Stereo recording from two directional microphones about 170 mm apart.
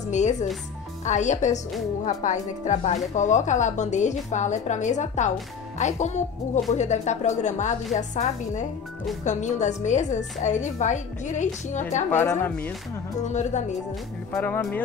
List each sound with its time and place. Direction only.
0.0 s a woman's voice: 45° left (ahead or behind)
12.1 s speech: 10° left (ahead or behind)
13.2 s a woman's voice: 45° left (ahead or behind)
14.3 s speech: 10° left (ahead or behind)